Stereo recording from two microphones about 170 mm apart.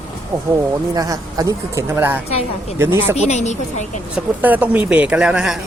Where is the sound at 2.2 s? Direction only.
35° left (ahead or behind).